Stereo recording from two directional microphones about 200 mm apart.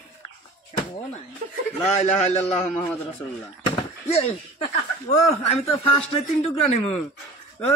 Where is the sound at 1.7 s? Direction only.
35° left (ahead or behind).